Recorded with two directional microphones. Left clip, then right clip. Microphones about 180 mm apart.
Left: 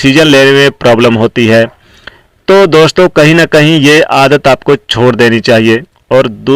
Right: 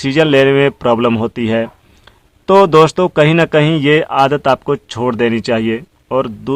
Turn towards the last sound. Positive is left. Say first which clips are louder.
# left 9 dB
turn(degrees=25)  # may be behind; listen again after turning